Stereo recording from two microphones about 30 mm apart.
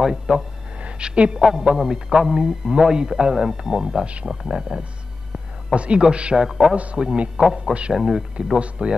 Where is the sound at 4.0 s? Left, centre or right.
Right.